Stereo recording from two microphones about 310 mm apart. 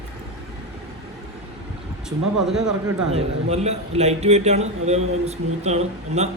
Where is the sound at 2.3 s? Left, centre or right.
Centre.